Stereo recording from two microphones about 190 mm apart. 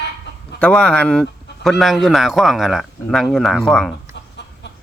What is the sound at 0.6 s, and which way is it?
Speech, 5° left (ahead or behind).